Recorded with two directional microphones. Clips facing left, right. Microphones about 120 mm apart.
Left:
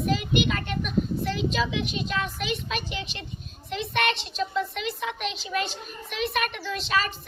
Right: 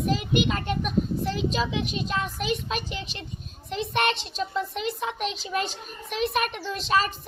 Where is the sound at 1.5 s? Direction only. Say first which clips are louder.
Even; 40° right (ahead or behind).